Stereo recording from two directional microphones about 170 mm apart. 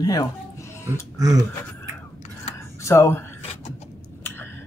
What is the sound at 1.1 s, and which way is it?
Speech, 20° right (ahead or behind).